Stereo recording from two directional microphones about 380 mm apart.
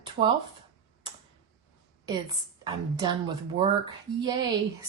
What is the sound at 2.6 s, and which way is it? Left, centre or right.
A woman's voice, centre.